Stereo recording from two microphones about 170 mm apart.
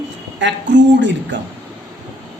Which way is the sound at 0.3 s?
90° right.